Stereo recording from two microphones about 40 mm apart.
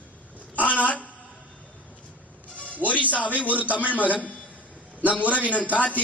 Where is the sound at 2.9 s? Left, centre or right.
Left.